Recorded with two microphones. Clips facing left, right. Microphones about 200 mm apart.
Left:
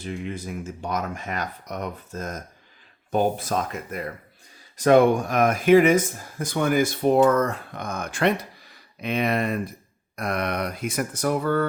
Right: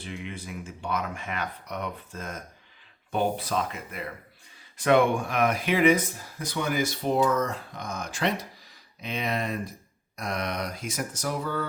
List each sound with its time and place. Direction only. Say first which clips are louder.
0.0 s speech: left 6 dB; 40° left (ahead or behind); by 11.6 s 60° left (ahead or behind)